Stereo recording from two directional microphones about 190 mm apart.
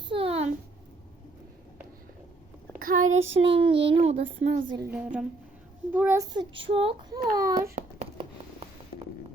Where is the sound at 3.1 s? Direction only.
80° right.